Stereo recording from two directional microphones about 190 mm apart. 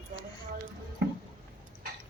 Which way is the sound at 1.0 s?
65° right (ahead or behind).